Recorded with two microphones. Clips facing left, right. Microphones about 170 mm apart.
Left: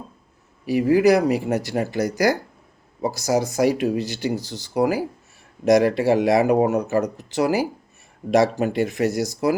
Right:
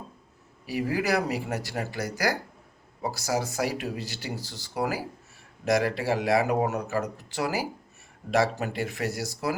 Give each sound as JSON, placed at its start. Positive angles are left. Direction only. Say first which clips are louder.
{"t": 0.7, "sound": "speech", "louder": "left 10 dB", "side_deg": 20}